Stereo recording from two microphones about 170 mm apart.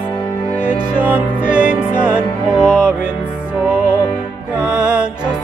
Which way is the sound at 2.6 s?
5° right (ahead or behind).